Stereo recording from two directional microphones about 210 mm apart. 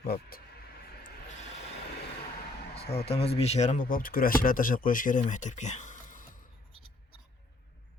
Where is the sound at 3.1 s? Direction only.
30° left (ahead or behind).